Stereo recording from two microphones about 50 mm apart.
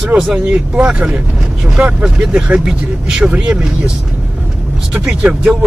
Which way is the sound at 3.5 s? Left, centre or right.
Centre.